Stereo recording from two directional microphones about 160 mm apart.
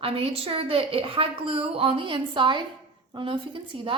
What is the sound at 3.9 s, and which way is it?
Speech, 30° right (ahead or behind).